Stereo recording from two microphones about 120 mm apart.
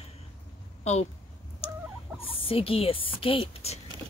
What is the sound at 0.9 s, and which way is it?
Speech, 65° left (ahead or behind).